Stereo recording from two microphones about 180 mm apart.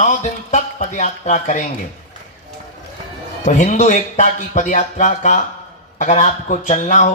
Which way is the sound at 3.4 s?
45° left (ahead or behind).